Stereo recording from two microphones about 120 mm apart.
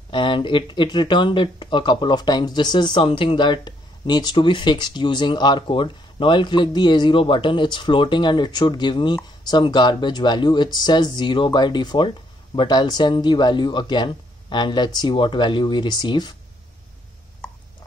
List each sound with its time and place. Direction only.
0.1 s speech: 45° left (ahead or behind)